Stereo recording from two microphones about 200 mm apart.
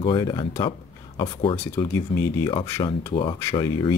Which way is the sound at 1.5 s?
10° left (ahead or behind).